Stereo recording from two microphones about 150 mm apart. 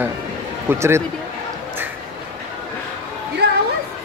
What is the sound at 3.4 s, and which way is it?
Music, 90° right.